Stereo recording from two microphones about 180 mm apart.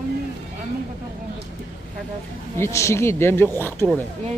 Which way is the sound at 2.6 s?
15° left (ahead or behind).